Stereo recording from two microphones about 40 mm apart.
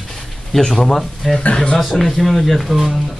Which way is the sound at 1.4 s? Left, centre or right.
Left.